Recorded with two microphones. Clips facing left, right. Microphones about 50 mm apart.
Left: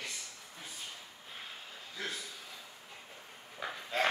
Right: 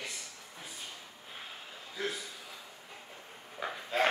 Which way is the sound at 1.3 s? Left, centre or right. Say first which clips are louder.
Right 1 dB; centre.